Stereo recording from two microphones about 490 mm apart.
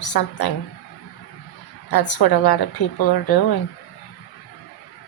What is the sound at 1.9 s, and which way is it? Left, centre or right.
A woman's voice, left.